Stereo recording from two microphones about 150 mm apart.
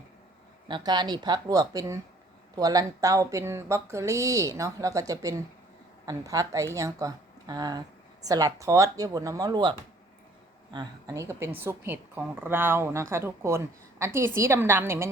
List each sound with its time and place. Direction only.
0.7 s a woman's voice: 30° right (ahead or behind)